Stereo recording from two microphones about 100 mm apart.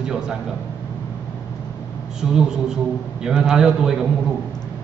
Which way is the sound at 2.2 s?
5° right (ahead or behind).